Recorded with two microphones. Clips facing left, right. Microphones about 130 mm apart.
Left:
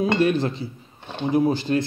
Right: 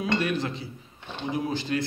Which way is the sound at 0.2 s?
30° left (ahead or behind).